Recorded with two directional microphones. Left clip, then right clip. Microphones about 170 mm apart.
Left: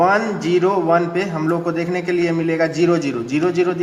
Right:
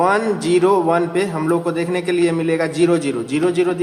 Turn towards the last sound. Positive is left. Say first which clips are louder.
# even
turn(degrees=-25)  # may be behind; listen again after turning